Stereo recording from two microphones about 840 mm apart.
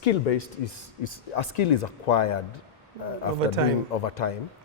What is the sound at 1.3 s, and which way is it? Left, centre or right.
A man's voice, left.